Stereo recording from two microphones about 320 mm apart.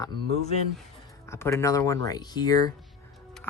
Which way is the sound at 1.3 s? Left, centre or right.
Centre.